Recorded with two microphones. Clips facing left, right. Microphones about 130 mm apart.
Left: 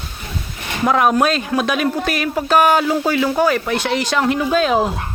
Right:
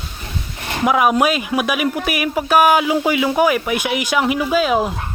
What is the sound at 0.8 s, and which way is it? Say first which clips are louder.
Speech: even; 10° right (ahead or behind).